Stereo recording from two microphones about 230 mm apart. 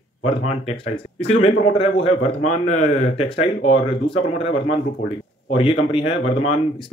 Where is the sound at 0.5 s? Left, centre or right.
Left.